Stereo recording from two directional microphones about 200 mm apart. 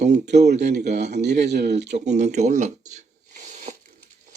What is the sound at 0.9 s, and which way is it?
Speech, 35° right (ahead or behind).